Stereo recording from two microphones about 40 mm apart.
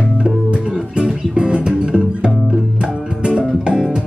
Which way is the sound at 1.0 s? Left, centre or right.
Right.